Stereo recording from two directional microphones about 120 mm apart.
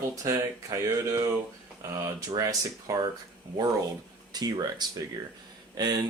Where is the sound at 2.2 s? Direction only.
30° right (ahead or behind).